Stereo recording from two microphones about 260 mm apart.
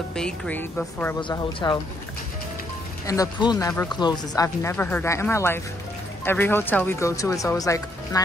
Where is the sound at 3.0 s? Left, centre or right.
Centre.